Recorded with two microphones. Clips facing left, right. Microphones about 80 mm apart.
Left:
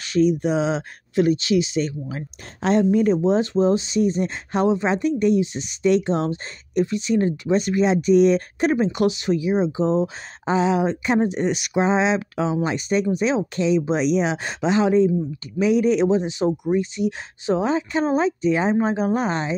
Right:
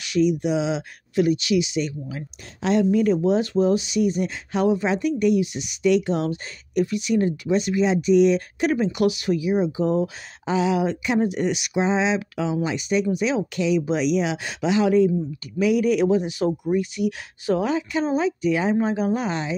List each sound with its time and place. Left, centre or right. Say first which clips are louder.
0.0 s speech: left 2 dB; left
11.7 s speech: left 3 dB; left